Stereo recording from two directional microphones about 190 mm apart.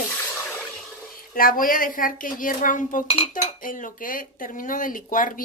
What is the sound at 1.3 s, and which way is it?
Speech, 45° left (ahead or behind).